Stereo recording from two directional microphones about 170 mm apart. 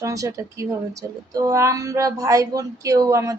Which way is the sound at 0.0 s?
20° right (ahead or behind).